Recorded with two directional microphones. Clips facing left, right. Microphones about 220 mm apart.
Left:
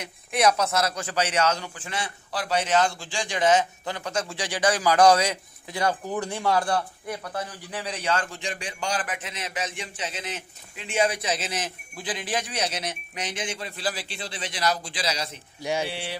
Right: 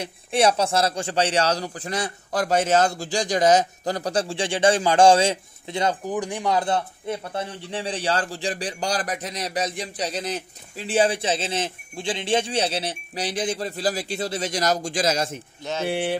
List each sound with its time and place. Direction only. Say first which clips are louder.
0.0 s a man's voice: right 2 dB; 30° right (ahead or behind); by 15.4 s 50° right (ahead or behind)
15.6 s speech: even; 10° left (ahead or behind)
15.9 s a sound: right 10 dB; 50° right (ahead or behind)